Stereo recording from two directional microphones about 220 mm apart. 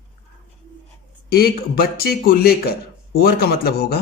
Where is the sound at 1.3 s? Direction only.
45° left (ahead or behind).